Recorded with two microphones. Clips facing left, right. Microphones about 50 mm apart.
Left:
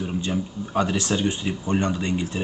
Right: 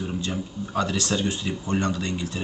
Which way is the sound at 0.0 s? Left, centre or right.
Centre.